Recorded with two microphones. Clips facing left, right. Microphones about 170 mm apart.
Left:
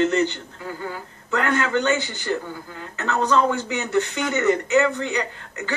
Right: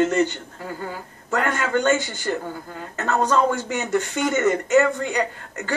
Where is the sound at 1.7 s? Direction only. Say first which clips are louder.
Right 2 dB; 45° right (ahead or behind).